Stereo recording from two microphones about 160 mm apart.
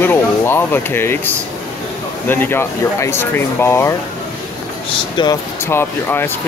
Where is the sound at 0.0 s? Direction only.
15° left (ahead or behind).